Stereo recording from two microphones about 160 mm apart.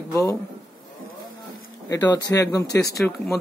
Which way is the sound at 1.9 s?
25° left (ahead or behind).